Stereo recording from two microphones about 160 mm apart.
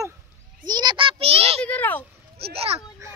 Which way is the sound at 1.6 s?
10° left (ahead or behind).